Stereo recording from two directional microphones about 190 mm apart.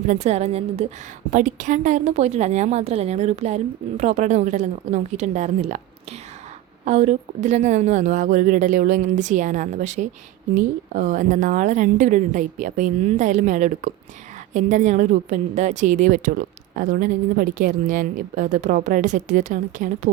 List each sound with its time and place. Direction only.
0.3 s a woman's voice: 35° right (ahead or behind)